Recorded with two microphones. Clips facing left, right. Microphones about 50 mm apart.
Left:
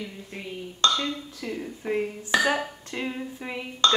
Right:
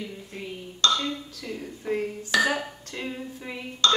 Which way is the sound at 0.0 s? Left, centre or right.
Centre.